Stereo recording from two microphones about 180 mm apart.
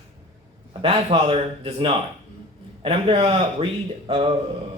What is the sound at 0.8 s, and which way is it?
Speech, 30° right (ahead or behind).